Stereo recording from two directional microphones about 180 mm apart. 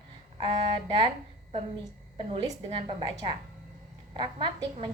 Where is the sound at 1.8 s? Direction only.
25° right (ahead or behind).